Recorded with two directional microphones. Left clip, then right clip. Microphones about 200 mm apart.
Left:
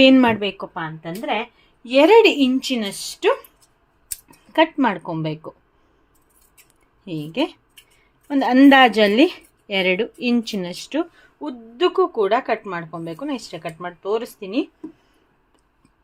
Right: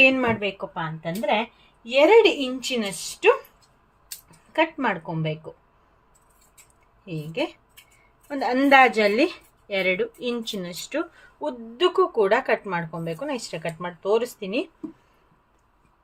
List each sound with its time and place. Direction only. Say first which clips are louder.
0.0 s a woman's voice: left 4 dB; 45° left (ahead or behind)
0.5 s a woman's voice: left 2 dB; 35° left (ahead or behind)
1.8 s a woman's voice: left 3 dB; 50° left (ahead or behind)
4.5 s a woman's voice: left 5 dB; 40° left (ahead or behind)
7.0 s a woman's voice: left 4 dB; 45° left (ahead or behind)
11.3 s speech: left 2 dB; 10° left (ahead or behind)